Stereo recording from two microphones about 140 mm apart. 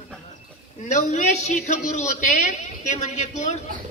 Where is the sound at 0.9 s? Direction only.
60° left (ahead or behind).